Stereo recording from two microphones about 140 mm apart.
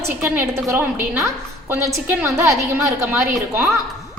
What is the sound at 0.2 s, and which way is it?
A woman's voice, 15° right (ahead or behind).